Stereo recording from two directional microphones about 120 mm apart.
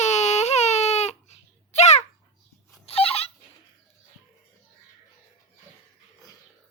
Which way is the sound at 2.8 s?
55° left (ahead or behind).